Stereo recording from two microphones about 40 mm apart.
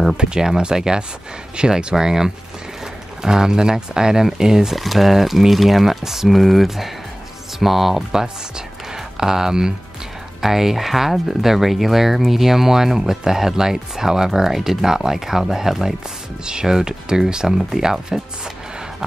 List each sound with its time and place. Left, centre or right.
0.2 s speech: centre